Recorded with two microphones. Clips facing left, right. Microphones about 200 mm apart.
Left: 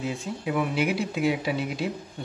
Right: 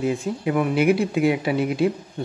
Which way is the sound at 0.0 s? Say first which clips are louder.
Right 7 dB; 55° right (ahead or behind).